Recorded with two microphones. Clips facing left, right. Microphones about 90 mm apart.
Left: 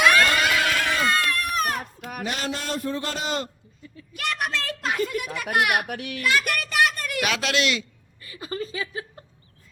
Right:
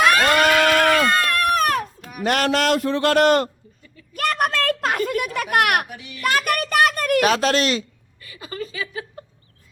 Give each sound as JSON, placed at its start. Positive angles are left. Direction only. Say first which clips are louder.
{"t": 0.0, "sound": "goat", "louder": "right 3 dB", "side_deg": -55}
{"t": 2.2, "sound": "speech", "louder": "right 11 dB", "side_deg": -70}
{"t": 4.1, "sound": "a child's voice", "louder": "right 7 dB", "side_deg": -45}
{"t": 5.9, "sound": "a child's voice", "louder": "left 6 dB", "side_deg": 60}
{"t": 6.2, "sound": "a child's voice", "louder": "right 4 dB", "side_deg": -45}
{"t": 8.2, "sound": "speech", "louder": "even", "side_deg": 30}